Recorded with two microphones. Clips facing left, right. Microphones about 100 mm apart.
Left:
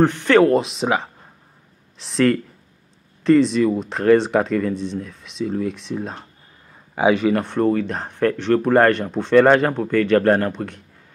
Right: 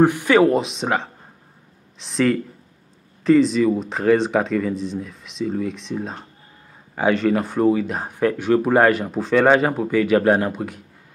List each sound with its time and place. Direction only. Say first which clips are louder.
0.0 s speech: even; 10° right (ahead or behind)
7.0 s speech: left 2 dB; 10° left (ahead or behind)
7.3 s speech: right 1 dB; 5° right (ahead or behind)